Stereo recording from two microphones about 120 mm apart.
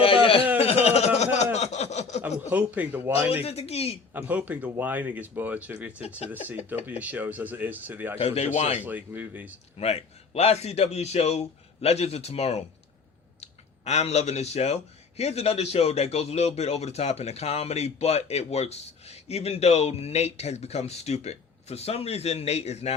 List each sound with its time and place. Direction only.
0.0 s a sound: 50° left (ahead or behind); by 2.2 s 70° left (ahead or behind)
2.5 s speech: 15° right (ahead or behind)
3.4 s speech: 60° left (ahead or behind)
4.1 s speech: 15° right (ahead or behind)
7.0 s speech: 15° right (ahead or behind)
8.2 s speech: 60° left (ahead or behind)
8.8 s speech: 15° right (ahead or behind)
9.7 s speech: 60° left (ahead or behind)